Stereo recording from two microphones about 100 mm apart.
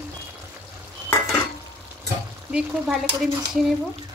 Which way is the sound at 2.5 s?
5° right (ahead or behind).